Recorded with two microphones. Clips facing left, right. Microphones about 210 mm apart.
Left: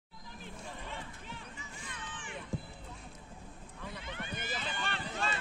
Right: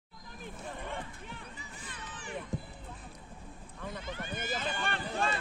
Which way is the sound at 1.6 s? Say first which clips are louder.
Even; 35° right (ahead or behind).